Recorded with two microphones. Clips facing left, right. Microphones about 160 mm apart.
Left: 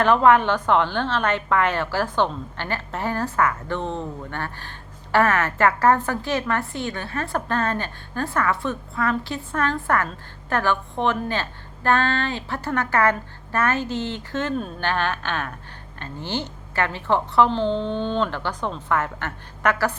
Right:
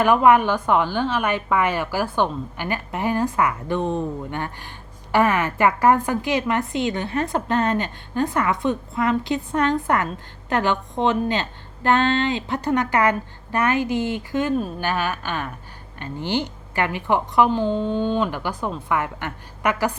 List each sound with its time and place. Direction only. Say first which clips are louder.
0.0 s a woman's voice: right 1 dB; 10° right (ahead or behind)